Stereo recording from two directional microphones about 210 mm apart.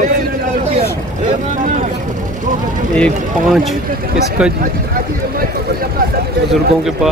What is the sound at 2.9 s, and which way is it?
Speech, centre (ahead or behind).